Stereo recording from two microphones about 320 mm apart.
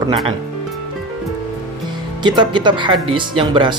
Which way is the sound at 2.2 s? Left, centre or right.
Centre.